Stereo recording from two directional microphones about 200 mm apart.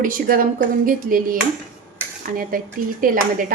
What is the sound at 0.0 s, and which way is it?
A woman's voice, 45° right (ahead or behind).